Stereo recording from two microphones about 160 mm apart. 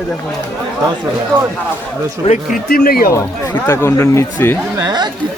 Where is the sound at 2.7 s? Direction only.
70° left (ahead or behind).